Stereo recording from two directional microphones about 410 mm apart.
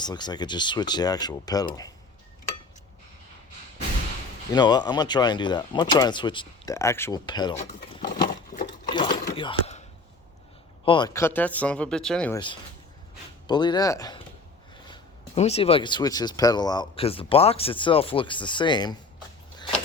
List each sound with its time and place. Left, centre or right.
0.0 s speech: centre
4.5 s speech: centre
8.9 s a sound: centre
10.8 s speech: centre